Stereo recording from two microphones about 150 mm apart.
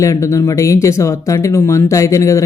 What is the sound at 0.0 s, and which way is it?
Speech, 20° left (ahead or behind).